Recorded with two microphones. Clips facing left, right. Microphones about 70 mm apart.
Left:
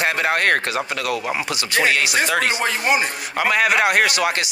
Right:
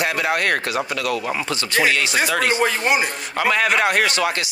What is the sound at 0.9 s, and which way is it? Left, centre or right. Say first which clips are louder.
Speech: even; left.